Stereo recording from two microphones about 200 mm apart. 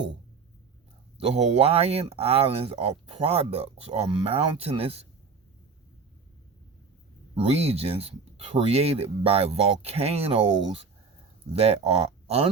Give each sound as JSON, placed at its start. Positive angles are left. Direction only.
{"t": 1.2, "sound": "speech", "side_deg": -30}
{"t": 7.3, "sound": "speech", "side_deg": -30}
{"t": 11.5, "sound": "speech", "side_deg": -30}